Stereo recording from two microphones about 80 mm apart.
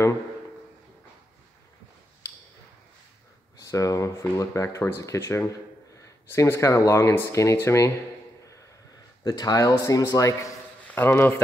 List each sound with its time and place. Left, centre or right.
3.6 s speech: left
9.2 s speech: left
10.9 s a man's voice: left